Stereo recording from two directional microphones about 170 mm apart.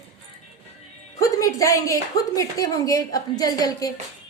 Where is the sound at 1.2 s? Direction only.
20° left (ahead or behind).